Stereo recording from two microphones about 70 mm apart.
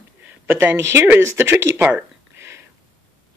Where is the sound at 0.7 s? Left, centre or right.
Right.